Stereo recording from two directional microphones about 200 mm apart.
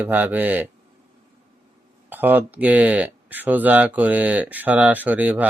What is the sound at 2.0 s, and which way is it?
Speech, 10° right (ahead or behind).